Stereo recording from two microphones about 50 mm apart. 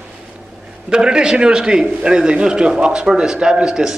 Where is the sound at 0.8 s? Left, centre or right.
Centre.